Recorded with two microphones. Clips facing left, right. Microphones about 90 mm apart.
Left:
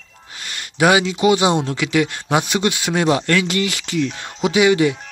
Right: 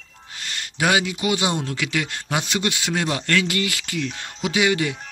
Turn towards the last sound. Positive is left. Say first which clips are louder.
# left 6 dB
turn(degrees=20)  # may be behind; listen again after turning